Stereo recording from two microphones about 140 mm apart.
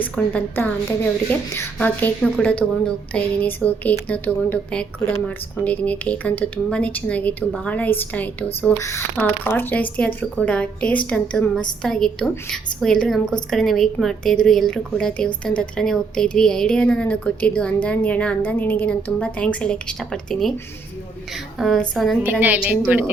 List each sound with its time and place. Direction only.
0.0 s a woman's voice: 10° left (ahead or behind)
21.6 s a woman's voice: centre (ahead or behind)
22.2 s a woman's voice: 15° right (ahead or behind)